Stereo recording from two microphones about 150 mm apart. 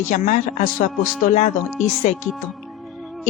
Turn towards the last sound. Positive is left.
turn(degrees=0)  # may be behind; listen again after turning